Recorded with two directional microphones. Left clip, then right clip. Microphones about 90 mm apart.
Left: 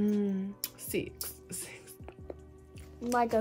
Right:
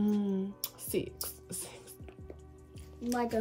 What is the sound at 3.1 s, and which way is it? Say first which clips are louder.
Speech: left 5 dB; 30° left (ahead or behind).